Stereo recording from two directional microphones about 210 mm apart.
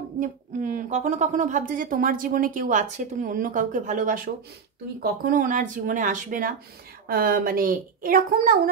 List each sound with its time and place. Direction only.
0.2 s a woman's voice: 40° right (ahead or behind)